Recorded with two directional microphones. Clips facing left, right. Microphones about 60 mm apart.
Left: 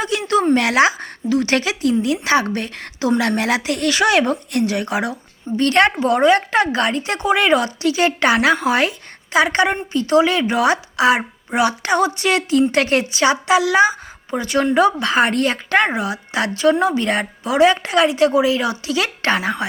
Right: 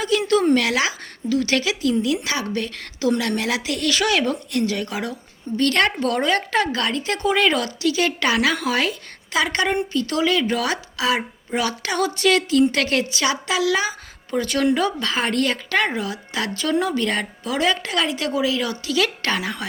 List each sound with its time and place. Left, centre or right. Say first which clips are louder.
0.0 s speech: left 1 dB; left